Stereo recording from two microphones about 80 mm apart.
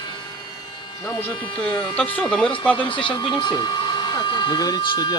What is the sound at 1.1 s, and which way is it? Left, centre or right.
Speech, left.